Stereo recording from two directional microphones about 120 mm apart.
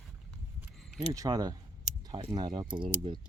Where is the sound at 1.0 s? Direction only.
30° right (ahead or behind).